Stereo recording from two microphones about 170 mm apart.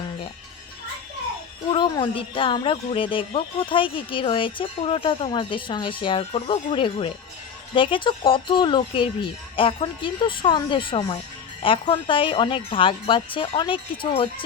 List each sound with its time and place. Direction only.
1.7 s speech: 30° left (ahead or behind)